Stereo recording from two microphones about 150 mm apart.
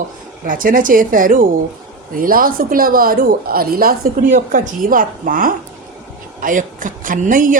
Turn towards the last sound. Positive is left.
turn(degrees=-60)  # may be behind; listen again after turning